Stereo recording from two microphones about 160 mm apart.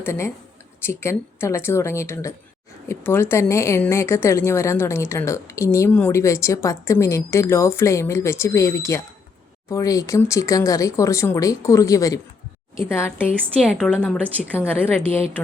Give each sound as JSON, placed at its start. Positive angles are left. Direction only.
{"t": 0.0, "sound": "a woman's voice", "side_deg": 15}
{"t": 13.4, "sound": "a woman's voice", "side_deg": -5}